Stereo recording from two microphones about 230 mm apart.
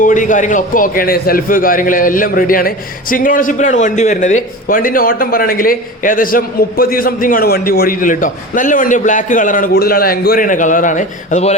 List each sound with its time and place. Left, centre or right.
0.0 s a man's voice: left